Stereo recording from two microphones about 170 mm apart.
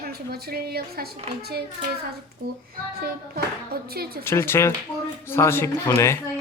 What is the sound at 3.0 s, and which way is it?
A woman's voice, 65° right (ahead or behind).